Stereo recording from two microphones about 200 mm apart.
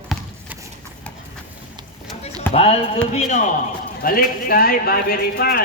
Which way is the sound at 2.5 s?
30° left (ahead or behind).